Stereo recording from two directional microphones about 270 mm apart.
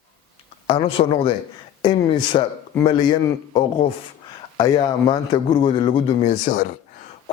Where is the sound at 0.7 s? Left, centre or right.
Left.